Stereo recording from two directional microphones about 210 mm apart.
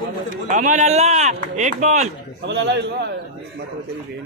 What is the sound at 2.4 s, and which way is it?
Speech, 55° right (ahead or behind).